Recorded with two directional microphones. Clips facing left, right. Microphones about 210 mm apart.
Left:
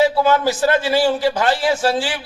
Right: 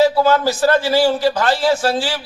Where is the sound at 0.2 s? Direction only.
20° left (ahead or behind).